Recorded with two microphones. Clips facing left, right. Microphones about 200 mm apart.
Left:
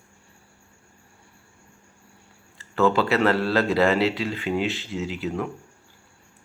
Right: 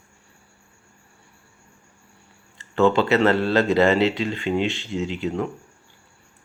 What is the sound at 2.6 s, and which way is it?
Speech, 5° left (ahead or behind).